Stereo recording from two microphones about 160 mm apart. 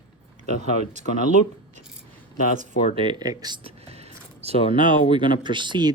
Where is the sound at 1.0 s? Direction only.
50° right (ahead or behind).